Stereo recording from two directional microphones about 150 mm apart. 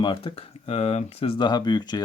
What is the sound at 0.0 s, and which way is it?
Speech, 30° left (ahead or behind).